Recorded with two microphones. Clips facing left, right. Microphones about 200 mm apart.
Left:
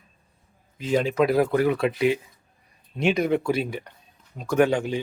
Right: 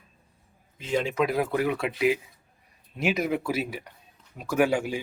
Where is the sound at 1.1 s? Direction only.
35° left (ahead or behind).